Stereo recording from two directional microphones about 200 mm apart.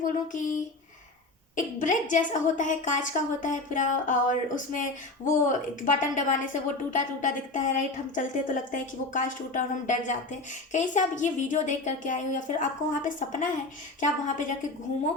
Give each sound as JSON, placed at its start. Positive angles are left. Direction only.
{"t": 1.5, "sound": "a woman's voice", "side_deg": 40}